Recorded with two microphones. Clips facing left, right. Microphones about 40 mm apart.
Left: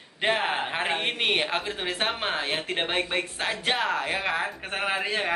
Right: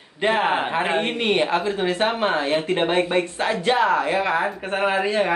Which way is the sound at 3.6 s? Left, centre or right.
Centre.